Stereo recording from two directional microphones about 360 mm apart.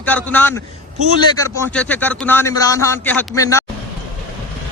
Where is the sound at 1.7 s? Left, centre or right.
Centre.